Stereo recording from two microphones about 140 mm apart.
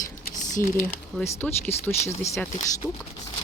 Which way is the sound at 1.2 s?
15° left (ahead or behind).